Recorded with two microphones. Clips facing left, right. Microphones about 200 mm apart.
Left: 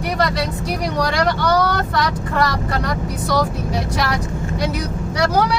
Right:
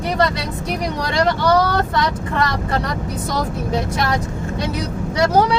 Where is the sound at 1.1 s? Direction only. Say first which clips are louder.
Right 4 dB; 25° right (ahead or behind).